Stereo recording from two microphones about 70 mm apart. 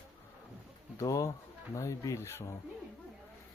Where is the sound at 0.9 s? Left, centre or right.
Left.